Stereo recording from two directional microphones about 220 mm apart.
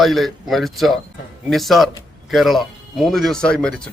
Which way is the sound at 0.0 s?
Centre (ahead or behind).